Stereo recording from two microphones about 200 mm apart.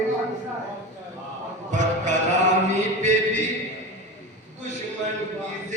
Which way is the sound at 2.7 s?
35° right (ahead or behind).